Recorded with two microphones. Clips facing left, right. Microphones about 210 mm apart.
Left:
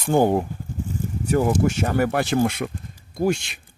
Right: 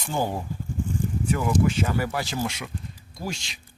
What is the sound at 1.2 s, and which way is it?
Speech, 40° left (ahead or behind).